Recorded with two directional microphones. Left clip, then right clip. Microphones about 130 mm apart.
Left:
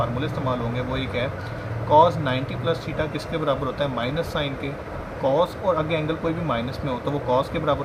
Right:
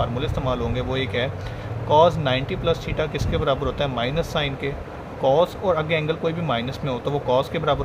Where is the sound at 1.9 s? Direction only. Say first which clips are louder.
Even; 90° right.